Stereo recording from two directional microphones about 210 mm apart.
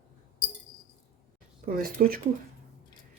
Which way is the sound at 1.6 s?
45° right (ahead or behind).